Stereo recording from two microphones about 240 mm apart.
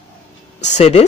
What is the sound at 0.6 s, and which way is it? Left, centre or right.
Speech, left.